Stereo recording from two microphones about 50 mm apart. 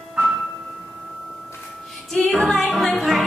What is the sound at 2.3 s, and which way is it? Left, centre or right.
Music, centre.